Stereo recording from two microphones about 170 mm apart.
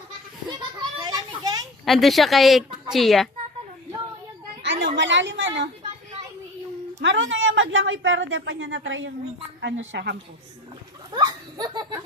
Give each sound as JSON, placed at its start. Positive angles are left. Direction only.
{"t": 0.9, "sound": "children playing", "side_deg": -25}
{"t": 1.8, "sound": "speech", "side_deg": 0}
{"t": 4.6, "sound": "a sound", "side_deg": -90}
{"t": 4.9, "sound": "a woman's voice", "side_deg": -90}
{"t": 7.0, "sound": "a woman's voice", "side_deg": -90}
{"t": 11.1, "sound": "a child's voice", "side_deg": -25}